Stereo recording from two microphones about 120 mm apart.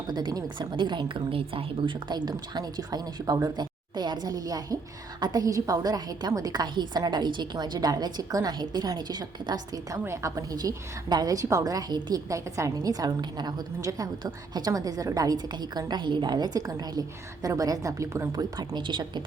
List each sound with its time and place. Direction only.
0.1 s a woman's voice: 35° right (ahead or behind)